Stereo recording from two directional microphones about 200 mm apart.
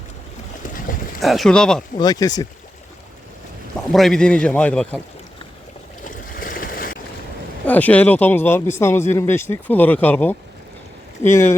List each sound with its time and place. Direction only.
0.6 s boat: 45° left (ahead or behind)
1.2 s a man's voice: centre (ahead or behind)
2.0 s speech: 20° left (ahead or behind)
3.9 s a man's voice: centre (ahead or behind)
6.1 s boat: 45° left (ahead or behind)
7.7 s speech: 10° left (ahead or behind)